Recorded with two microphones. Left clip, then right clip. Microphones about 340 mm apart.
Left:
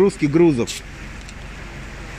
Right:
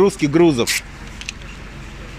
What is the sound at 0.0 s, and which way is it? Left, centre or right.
Speech, centre.